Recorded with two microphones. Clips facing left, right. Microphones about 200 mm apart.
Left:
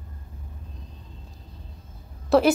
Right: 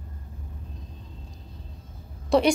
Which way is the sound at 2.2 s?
5° left (ahead or behind).